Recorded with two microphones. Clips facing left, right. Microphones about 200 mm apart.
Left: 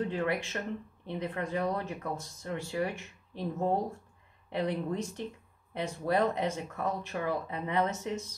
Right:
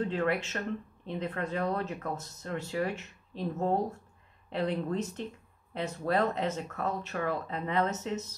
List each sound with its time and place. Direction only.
0.0 s speech: 15° left (ahead or behind)